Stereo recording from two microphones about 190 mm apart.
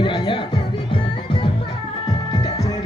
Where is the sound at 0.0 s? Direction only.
25° left (ahead or behind).